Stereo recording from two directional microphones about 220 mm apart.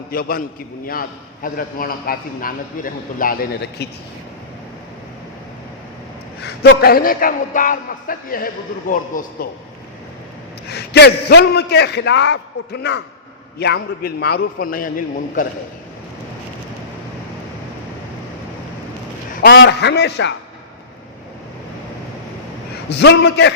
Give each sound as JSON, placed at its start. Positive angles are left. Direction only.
{"t": 0.1, "sound": "a man's voice", "side_deg": 40}
{"t": 6.4, "sound": "a man's voice", "side_deg": 45}
{"t": 10.7, "sound": "a man's voice", "side_deg": 50}
{"t": 19.4, "sound": "a man's voice", "side_deg": 50}
{"t": 23.0, "sound": "a man's voice", "side_deg": 50}